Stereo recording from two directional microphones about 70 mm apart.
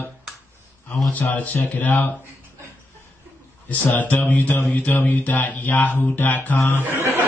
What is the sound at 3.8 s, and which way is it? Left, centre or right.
Speech, left.